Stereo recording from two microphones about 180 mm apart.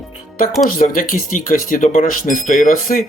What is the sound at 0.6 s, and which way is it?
Speech, 50° left (ahead or behind).